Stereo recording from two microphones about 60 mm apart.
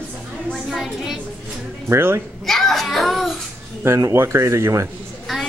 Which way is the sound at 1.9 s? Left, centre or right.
Right.